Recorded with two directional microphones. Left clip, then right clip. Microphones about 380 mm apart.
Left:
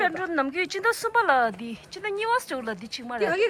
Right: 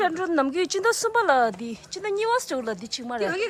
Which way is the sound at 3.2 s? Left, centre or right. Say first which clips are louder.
Left 4 dB; left.